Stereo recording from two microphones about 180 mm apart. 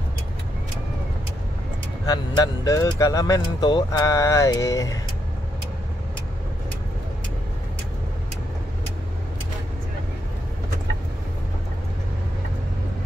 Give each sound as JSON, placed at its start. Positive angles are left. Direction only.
{"t": 2.0, "sound": "speech", "side_deg": 20}